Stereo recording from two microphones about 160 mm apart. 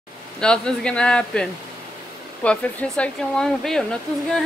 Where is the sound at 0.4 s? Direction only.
5° left (ahead or behind).